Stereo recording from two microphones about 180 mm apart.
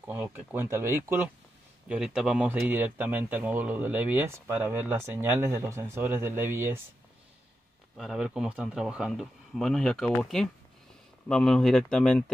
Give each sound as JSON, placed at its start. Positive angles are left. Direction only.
{"t": 0.0, "sound": "speech", "side_deg": -10}
{"t": 8.0, "sound": "speech", "side_deg": 0}